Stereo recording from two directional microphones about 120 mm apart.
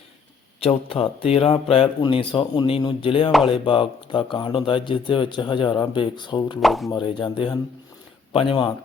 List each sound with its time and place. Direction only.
0.6 s speech: 50° left (ahead or behind)
3.3 s speech: centre (ahead or behind)
3.6 s speech: 45° left (ahead or behind)
6.6 s speech: centre (ahead or behind)
6.9 s speech: 45° left (ahead or behind)